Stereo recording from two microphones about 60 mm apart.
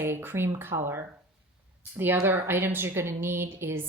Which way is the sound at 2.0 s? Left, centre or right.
Right.